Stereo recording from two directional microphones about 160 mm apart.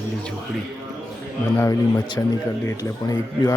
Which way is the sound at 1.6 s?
15° left (ahead or behind).